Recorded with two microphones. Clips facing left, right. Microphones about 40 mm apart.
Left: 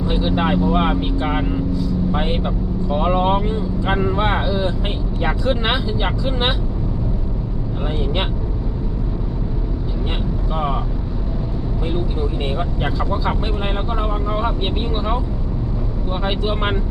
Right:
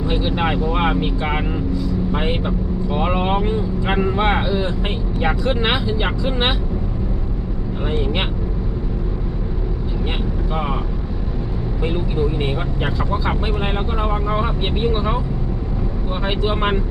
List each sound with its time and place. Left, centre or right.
0.1 s speech: centre
10.5 s speech: centre
12.5 s speech: centre
16.2 s speech: centre